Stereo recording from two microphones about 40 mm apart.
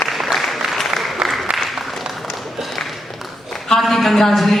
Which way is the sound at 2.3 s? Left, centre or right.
Centre.